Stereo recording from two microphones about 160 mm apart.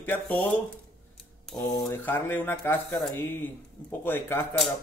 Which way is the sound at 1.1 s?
5° left (ahead or behind).